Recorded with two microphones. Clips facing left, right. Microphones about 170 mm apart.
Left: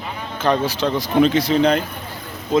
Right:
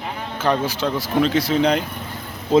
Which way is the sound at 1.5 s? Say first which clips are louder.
Left 1 dB; 15° right (ahead or behind).